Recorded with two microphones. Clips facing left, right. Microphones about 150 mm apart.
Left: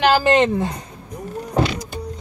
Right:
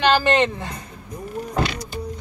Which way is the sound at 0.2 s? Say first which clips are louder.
Left 4 dB; 20° left (ahead or behind).